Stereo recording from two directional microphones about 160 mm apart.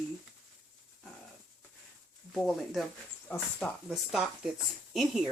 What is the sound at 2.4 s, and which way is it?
Speech, centre (ahead or behind).